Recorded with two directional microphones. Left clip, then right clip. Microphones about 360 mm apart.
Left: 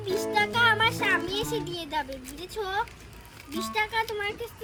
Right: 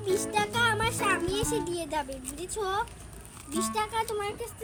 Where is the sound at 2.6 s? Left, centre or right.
Centre.